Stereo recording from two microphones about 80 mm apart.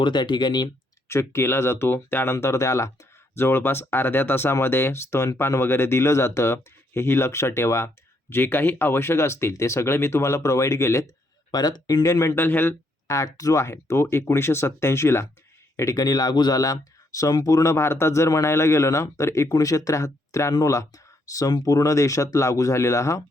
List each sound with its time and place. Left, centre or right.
0.0 s speech: left
1.0 s speech: left
11.5 s speech: left
12.0 s speech: left
12.3 s a man's voice: left
13.1 s speech: left
16.0 s speech: left